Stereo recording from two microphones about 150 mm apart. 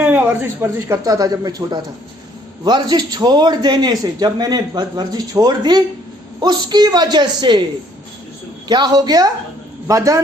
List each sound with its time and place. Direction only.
0.0 s a man's voice: 10° right (ahead or behind); by 7.6 s 30° right (ahead or behind)
8.6 s a man's voice: 30° right (ahead or behind)